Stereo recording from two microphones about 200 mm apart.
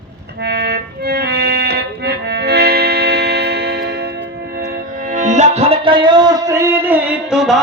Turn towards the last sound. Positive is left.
turn(degrees=0)  # may be behind; listen again after turning